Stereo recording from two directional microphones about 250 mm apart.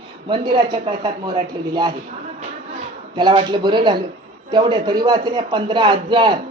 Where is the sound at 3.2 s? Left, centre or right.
Centre.